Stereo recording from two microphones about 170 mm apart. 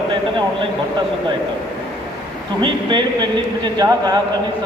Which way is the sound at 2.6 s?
30° right (ahead or behind).